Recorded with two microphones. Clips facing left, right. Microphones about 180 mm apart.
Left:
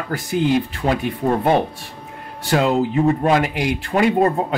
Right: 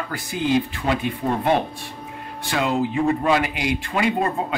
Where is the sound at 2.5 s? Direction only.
40° left (ahead or behind).